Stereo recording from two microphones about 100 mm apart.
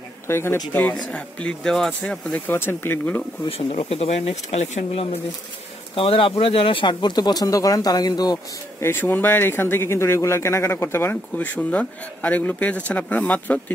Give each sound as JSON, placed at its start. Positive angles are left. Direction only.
{"t": 0.3, "sound": "speech", "side_deg": 25}
{"t": 1.1, "sound": "speech", "side_deg": 10}
{"t": 2.4, "sound": "speech", "side_deg": 20}
{"t": 3.4, "sound": "speech", "side_deg": 75}
{"t": 5.9, "sound": "speech", "side_deg": 60}
{"t": 8.8, "sound": "speech", "side_deg": 20}